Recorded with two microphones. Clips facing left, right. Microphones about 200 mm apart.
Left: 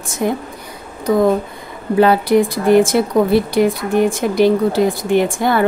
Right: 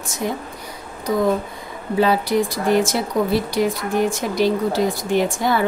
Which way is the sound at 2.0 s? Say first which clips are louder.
Left 5 dB; 60° left (ahead or behind).